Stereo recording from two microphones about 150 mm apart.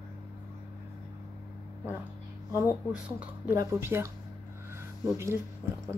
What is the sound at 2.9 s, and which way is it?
Speech, 10° right (ahead or behind).